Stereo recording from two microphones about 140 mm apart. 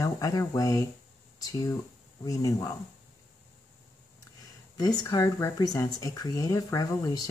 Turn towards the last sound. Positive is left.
turn(degrees=25)  # may be behind; listen again after turning